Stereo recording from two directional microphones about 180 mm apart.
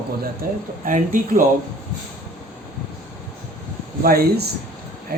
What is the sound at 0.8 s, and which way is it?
Speech, 45° right (ahead or behind).